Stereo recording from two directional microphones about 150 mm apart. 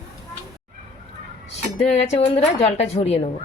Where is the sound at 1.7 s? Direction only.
45° left (ahead or behind).